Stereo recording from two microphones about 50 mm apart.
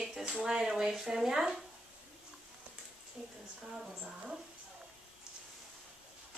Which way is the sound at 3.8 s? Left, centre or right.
Centre.